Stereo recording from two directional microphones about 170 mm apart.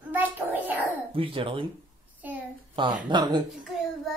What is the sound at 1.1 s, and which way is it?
Speech, 30° right (ahead or behind).